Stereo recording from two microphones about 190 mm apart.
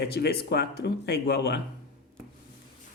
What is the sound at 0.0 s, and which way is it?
Speech, 60° left (ahead or behind).